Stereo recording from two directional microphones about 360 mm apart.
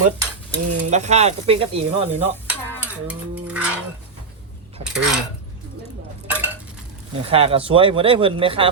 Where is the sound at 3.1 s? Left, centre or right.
Centre.